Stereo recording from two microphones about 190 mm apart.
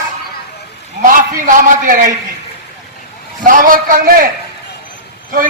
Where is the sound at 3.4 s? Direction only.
45° right (ahead or behind).